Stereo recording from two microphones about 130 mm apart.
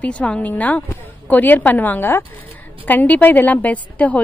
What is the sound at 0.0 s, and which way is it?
A woman's voice, 10° left (ahead or behind).